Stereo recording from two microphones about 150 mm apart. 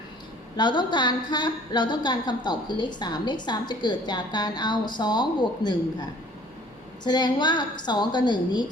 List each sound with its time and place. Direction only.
0.5 s a woman's voice: 30° left (ahead or behind)